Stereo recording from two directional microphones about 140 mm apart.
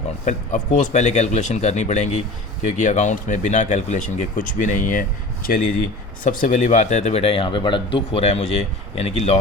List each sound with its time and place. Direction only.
0.3 s speech: 60° left (ahead or behind)